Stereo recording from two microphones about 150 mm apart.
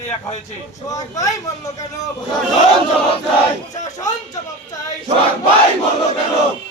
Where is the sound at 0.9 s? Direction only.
25° left (ahead or behind).